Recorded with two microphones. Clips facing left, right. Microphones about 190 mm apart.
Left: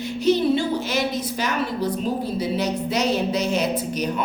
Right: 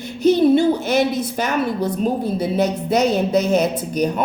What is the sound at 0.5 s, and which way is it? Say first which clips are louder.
A woman's voice: right 7 dB; 55° right (ahead or behind).